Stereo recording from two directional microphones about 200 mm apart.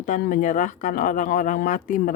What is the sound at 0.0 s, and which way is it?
Speech, 40° left (ahead or behind).